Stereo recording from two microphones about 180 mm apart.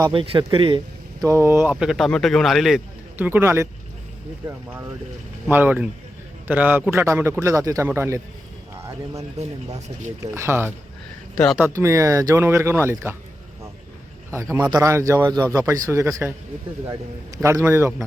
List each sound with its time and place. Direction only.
0.0 s speech: 30° right (ahead or behind)
1.2 s a man's voice: 15° right (ahead or behind)
8.8 s a sound: 15° right (ahead or behind)
10.3 s a man's voice: 15° right (ahead or behind)
11.3 s speech: centre (ahead or behind)
11.6 s a man's voice: 15° right (ahead or behind)
14.7 s a man's voice: 15° right (ahead or behind)